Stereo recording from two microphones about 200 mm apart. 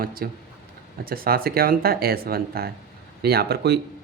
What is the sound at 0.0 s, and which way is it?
Speech, 45° right (ahead or behind).